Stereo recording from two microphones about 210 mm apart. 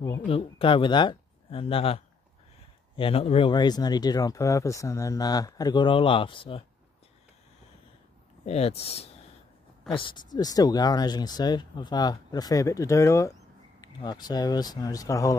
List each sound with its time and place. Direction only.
0.0 s speech: 25° left (ahead or behind)
3.0 s speech: 25° left (ahead or behind)
8.5 s speech: 30° left (ahead or behind)